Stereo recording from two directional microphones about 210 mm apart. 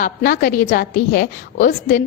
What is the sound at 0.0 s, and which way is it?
A woman's voice, 40° left (ahead or behind).